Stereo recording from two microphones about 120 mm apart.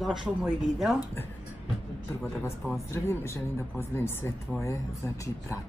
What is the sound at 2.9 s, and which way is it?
Speech, 20° left (ahead or behind).